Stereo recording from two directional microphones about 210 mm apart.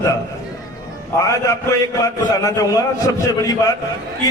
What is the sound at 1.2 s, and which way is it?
A man's voice, 15° left (ahead or behind).